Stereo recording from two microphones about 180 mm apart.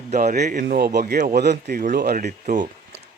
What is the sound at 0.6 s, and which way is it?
Speech, 50° right (ahead or behind).